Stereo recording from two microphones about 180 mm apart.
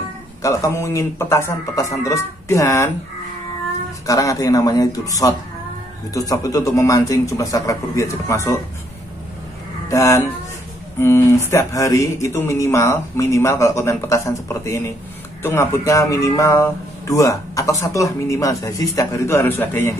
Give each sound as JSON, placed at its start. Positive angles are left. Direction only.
{"t": 0.4, "sound": "speech", "side_deg": 15}
{"t": 4.0, "sound": "speech", "side_deg": 20}
{"t": 9.8, "sound": "speech", "side_deg": 15}